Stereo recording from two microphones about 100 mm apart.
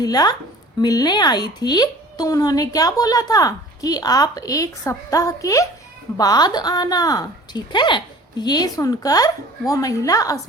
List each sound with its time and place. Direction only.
0.0 s a woman's voice: 40° left (ahead or behind)